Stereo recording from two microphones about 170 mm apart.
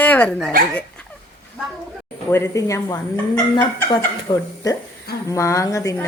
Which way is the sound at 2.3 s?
15° left (ahead or behind).